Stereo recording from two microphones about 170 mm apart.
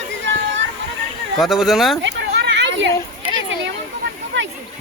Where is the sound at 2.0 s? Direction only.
85° right.